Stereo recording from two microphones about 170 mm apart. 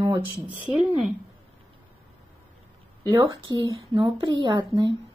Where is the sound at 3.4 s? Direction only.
25° right (ahead or behind).